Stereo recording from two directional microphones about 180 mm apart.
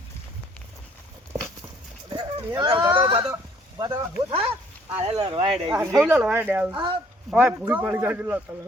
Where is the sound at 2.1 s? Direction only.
25° right (ahead or behind).